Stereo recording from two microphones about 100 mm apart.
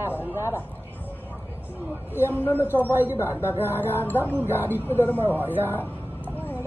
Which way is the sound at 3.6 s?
20° left (ahead or behind).